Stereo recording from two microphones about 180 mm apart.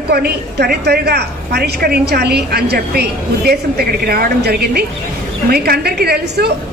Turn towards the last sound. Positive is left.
turn(degrees=-65)  # may be behind; listen again after turning